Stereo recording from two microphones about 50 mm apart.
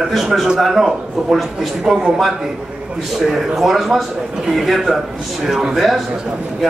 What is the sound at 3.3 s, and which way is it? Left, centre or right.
Speech, centre.